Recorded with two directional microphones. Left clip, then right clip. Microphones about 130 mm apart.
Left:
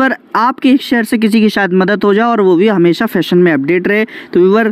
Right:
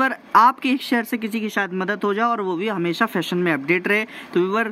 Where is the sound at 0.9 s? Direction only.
55° left (ahead or behind).